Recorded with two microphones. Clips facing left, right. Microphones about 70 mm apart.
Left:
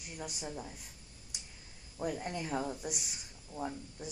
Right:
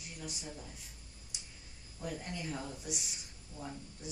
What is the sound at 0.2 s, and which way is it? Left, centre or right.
Speech, left.